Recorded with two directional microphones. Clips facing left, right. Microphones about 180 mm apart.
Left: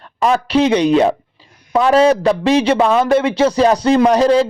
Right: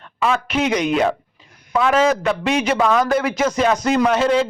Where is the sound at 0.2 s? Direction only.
35° left (ahead or behind).